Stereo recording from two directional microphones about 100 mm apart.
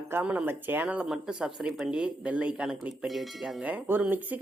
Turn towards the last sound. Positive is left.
turn(degrees=-20)  # may be behind; listen again after turning